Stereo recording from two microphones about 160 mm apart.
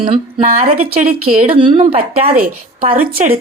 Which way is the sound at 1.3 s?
40° right (ahead or behind).